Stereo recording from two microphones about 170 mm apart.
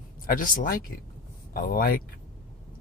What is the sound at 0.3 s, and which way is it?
Speech, 55° left (ahead or behind).